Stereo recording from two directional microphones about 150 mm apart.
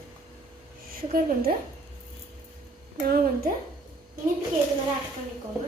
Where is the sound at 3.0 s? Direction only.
90° right.